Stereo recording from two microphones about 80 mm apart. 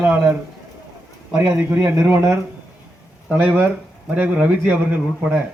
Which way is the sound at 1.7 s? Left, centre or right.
Right.